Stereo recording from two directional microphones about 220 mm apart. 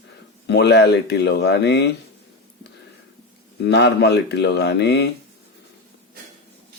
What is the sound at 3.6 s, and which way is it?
Speech, 50° left (ahead or behind).